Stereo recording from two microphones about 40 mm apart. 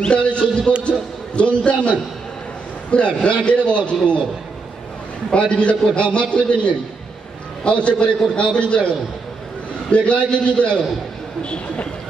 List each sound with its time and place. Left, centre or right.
0.0 s a man's voice: left
0.8 s a sound: left
2.9 s a man's voice: left
5.3 s a man's voice: left
9.8 s a man's voice: left